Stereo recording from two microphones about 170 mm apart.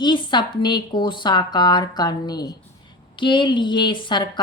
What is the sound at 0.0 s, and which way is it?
Speech, 25° left (ahead or behind).